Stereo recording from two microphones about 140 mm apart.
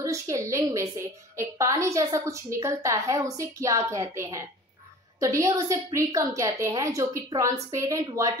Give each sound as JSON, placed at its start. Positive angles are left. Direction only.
{"t": 0.0, "sound": "a woman's voice", "side_deg": -20}